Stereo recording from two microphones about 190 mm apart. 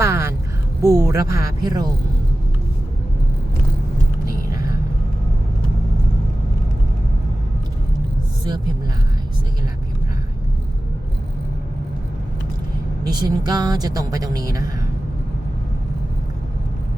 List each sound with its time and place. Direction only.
0.0 s a sound: 15° right (ahead or behind)
0.8 s speech: 15° right (ahead or behind)
13.1 s speech: 20° right (ahead or behind)